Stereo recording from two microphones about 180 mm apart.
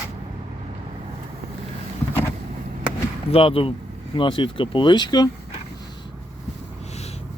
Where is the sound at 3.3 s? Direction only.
30° left (ahead or behind).